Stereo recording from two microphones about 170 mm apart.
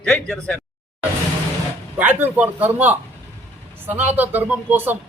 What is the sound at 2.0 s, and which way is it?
Speech, 10° right (ahead or behind).